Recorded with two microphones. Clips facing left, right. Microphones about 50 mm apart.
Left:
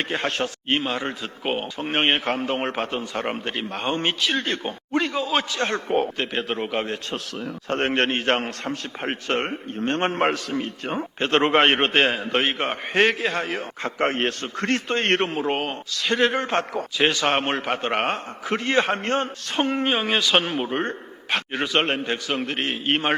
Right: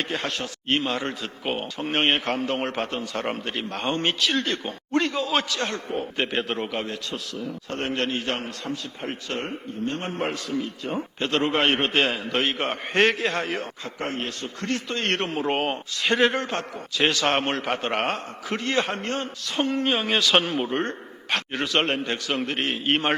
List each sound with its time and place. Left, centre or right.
0.1 s a man's voice: left
0.7 s speech: centre
4.4 s speech: left
4.9 s a man's voice: centre
5.5 s a man's voice: left
6.3 s a man's voice: centre
6.8 s a man's voice: left
12.5 s a man's voice: centre
13.8 s a man's voice: left
15.3 s a man's voice: centre
17.0 s speech: centre
18.5 s a man's voice: left
19.8 s a man's voice: centre